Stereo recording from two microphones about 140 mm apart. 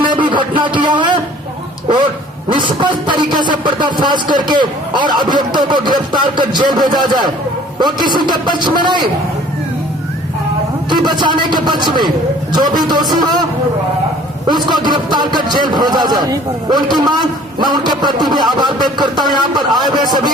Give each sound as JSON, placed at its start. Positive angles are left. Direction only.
{"t": 0.0, "sound": "a man's voice", "side_deg": -35}
{"t": 2.5, "sound": "a man's voice", "side_deg": -35}
{"t": 10.8, "sound": "a man's voice", "side_deg": -30}
{"t": 14.4, "sound": "a man's voice", "side_deg": -30}